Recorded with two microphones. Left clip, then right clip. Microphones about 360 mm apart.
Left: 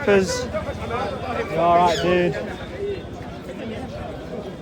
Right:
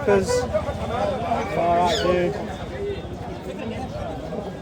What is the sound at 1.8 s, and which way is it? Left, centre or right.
Speech, left.